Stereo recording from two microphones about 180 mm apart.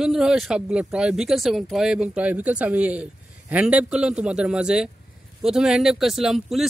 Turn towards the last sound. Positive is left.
turn(degrees=0)  # may be behind; listen again after turning